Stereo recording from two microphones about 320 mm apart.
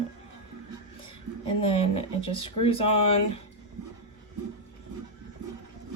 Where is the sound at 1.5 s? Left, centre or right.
Centre.